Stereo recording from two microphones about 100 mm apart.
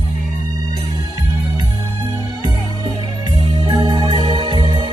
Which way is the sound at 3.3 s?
70° right (ahead or behind).